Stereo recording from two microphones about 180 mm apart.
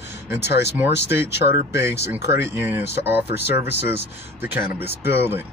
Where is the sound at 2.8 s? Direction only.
70° left (ahead or behind).